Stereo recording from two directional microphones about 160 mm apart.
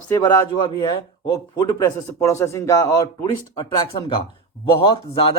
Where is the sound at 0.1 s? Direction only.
25° left (ahead or behind).